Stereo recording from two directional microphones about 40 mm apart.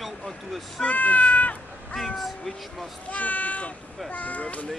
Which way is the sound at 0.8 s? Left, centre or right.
Left.